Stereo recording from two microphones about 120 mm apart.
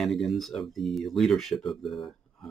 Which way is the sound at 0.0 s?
Centre (ahead or behind).